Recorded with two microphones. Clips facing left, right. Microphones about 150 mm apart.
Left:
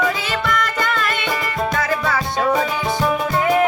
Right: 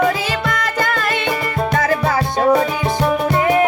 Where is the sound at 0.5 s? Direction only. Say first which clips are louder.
Right 1 dB; 35° right (ahead or behind).